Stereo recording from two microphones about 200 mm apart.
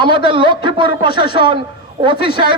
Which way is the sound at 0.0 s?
25° right (ahead or behind).